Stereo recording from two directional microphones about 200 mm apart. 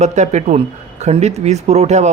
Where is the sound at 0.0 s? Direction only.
35° right (ahead or behind).